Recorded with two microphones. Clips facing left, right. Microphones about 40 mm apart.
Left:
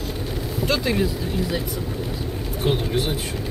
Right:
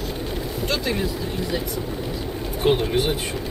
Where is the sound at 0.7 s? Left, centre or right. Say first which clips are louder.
Left 3 dB; centre.